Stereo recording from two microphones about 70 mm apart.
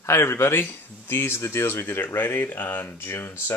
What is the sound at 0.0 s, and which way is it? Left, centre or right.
Speech, left.